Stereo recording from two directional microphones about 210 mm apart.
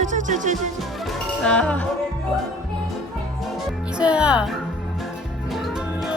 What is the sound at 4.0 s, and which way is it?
Speech, 5° right (ahead or behind).